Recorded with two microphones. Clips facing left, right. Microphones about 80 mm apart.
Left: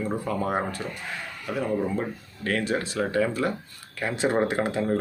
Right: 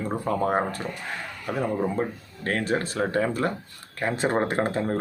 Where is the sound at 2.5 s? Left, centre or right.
Right.